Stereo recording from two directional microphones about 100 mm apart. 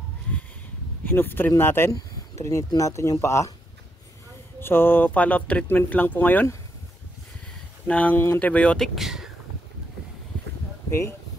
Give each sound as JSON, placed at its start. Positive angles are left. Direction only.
{"t": 1.0, "sound": "speech", "side_deg": 20}
{"t": 4.6, "sound": "speech", "side_deg": 25}
{"t": 7.8, "sound": "speech", "side_deg": 15}
{"t": 10.9, "sound": "speech", "side_deg": 25}